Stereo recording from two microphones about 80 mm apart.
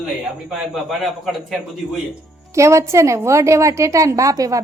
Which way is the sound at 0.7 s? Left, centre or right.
Centre.